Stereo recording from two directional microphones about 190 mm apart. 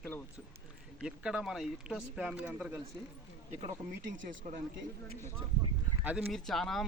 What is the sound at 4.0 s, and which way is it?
Speech, 65° right (ahead or behind).